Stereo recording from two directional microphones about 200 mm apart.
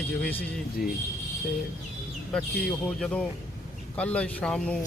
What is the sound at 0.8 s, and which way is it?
Speech, 45° left (ahead or behind).